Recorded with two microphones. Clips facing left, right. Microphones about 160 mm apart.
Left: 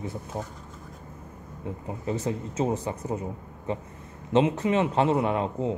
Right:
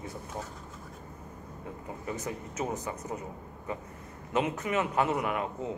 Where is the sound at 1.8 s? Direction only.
25° left (ahead or behind).